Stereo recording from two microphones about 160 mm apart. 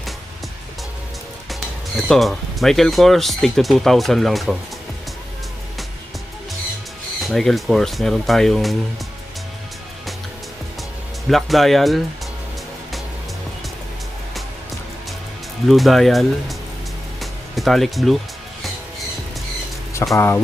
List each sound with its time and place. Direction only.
2.0 s speech: centre (ahead or behind)
7.2 s speech: centre (ahead or behind)
11.3 s speech: centre (ahead or behind)
15.6 s speech: centre (ahead or behind)
17.2 s music: centre (ahead or behind)
20.1 s speech: 15° left (ahead or behind)